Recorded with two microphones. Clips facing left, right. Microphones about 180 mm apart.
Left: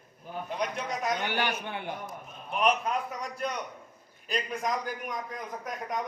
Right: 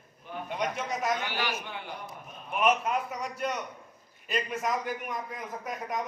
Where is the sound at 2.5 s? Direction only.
5° right (ahead or behind).